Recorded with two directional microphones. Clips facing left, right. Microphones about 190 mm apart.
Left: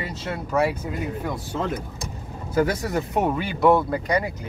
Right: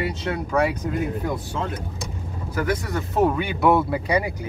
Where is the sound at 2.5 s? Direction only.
25° left (ahead or behind).